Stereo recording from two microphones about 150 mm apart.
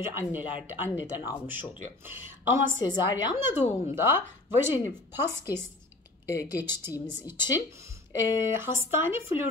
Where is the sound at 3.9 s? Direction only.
15° right (ahead or behind).